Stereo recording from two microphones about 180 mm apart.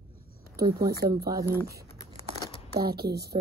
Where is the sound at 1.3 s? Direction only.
20° right (ahead or behind).